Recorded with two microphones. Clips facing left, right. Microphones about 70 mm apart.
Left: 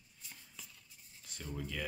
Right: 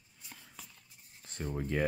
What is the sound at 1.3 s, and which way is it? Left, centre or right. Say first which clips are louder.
Speech: right 7 dB; right.